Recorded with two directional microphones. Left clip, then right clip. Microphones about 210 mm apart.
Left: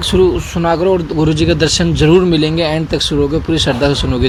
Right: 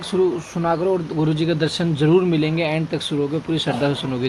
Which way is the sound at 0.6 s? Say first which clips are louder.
Left 7 dB; 25° left (ahead or behind).